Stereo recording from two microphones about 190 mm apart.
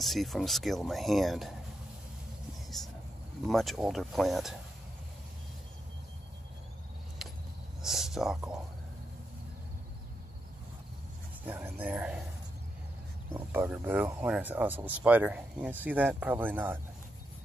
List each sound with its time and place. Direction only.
0.0 s speech: centre (ahead or behind)
2.7 s a sound: centre (ahead or behind)
3.4 s speech: centre (ahead or behind)
7.8 s a sound: centre (ahead or behind)
11.4 s speech: 10° right (ahead or behind)
13.3 s speech: 10° right (ahead or behind)